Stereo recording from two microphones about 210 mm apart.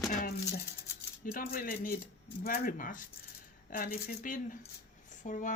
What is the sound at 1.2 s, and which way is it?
Speech, 40° left (ahead or behind).